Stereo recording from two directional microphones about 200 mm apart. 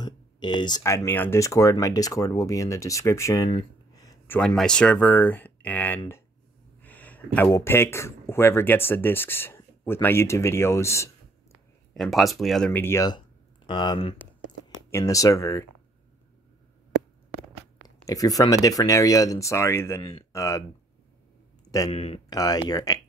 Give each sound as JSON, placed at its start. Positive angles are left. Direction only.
{"t": 0.0, "sound": "speech", "side_deg": 20}
{"t": 3.4, "sound": "a sound", "side_deg": 20}
{"t": 4.4, "sound": "speech", "side_deg": 5}
{"t": 6.8, "sound": "a sound", "side_deg": 10}
{"t": 7.4, "sound": "speech", "side_deg": 15}
{"t": 11.9, "sound": "speech", "side_deg": 0}
{"t": 17.8, "sound": "speech", "side_deg": 15}
{"t": 21.6, "sound": "a man's voice", "side_deg": 20}
{"t": 21.9, "sound": "speech", "side_deg": 30}
{"t": 22.3, "sound": "speech", "side_deg": 20}